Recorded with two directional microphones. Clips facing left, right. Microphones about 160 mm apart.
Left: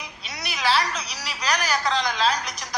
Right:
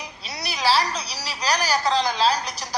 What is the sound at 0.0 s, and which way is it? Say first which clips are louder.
Speech: right 2 dB; 35° right (ahead or behind).